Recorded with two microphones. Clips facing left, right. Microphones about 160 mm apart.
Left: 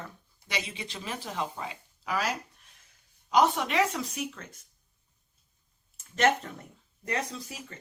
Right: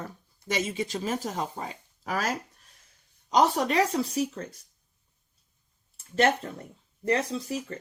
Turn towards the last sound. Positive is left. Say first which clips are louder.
# right 10 dB
turn(degrees=-35)  # may be behind; listen again after turning